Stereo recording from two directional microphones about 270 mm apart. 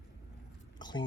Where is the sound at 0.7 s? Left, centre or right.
Centre.